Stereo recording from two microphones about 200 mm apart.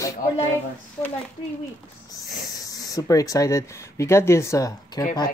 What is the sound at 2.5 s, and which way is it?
Speech, 15° left (ahead or behind).